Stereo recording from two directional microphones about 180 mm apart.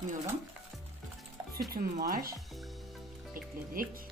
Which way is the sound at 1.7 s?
55° right (ahead or behind).